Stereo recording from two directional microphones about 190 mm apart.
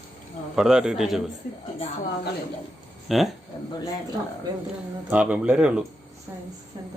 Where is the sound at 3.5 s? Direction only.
25° left (ahead or behind).